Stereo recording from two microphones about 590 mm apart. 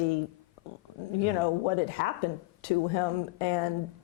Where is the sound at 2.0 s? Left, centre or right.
Left.